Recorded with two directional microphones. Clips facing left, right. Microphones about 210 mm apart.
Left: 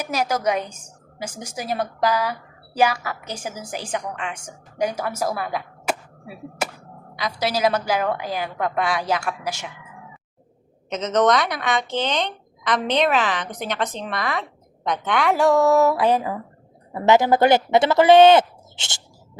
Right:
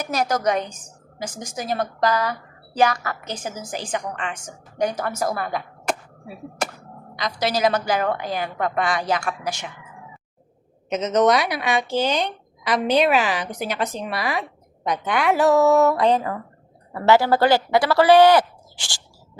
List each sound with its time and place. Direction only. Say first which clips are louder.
0.0 s a woman's voice: right 1 dB; 5° left (ahead or behind)
10.8 s a woman's voice: right 1 dB; 10° right (ahead or behind); by 19.0 s 20° left (ahead or behind)